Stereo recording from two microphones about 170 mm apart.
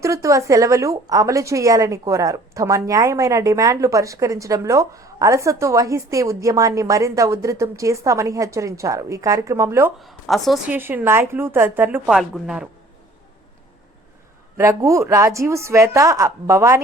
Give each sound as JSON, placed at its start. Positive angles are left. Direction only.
{"t": 0.0, "sound": "speech", "side_deg": -20}
{"t": 10.0, "sound": "a woman's voice", "side_deg": 0}
{"t": 10.7, "sound": "a woman's voice", "side_deg": -10}
{"t": 14.6, "sound": "a woman's voice", "side_deg": -20}